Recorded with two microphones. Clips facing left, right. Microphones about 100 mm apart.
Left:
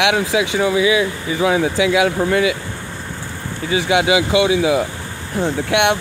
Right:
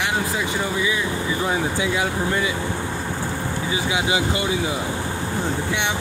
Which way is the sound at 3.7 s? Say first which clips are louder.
Left 8 dB; 70° left (ahead or behind).